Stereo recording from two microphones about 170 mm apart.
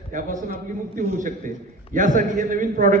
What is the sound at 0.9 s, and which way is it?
A man's voice, 50° right (ahead or behind).